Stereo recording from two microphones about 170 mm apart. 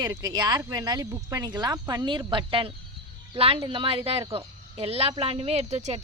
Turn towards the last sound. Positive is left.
turn(degrees=-40)  # may be behind; listen again after turning